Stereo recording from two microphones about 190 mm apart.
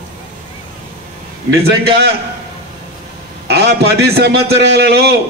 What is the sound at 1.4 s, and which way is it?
Speech, 60° right (ahead or behind).